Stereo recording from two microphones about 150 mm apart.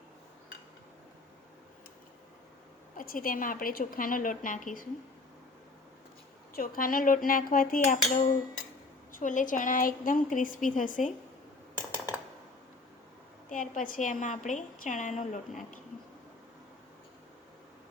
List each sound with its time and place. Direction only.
3.0 s a woman's voice: 70° left (ahead or behind)
6.6 s a woman's voice: 70° left (ahead or behind)
13.5 s a woman's voice: 60° left (ahead or behind)